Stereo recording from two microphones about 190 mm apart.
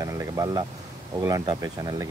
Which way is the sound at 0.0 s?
15° right (ahead or behind).